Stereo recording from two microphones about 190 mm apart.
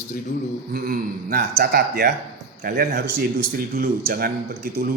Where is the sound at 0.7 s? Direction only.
50° right (ahead or behind).